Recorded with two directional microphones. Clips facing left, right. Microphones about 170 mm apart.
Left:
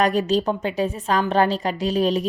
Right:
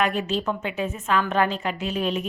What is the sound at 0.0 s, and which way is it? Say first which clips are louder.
Speech: left 5 dB; 35° left (ahead or behind).